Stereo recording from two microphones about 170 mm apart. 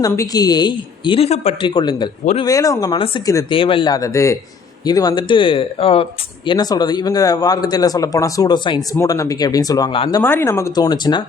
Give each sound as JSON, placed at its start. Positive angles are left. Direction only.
{"t": 0.0, "sound": "speech", "side_deg": 20}
{"t": 3.5, "sound": "speech", "side_deg": 30}
{"t": 10.2, "sound": "speech", "side_deg": 15}